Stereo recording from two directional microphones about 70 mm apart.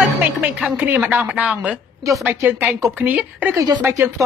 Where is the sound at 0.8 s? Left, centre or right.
Right.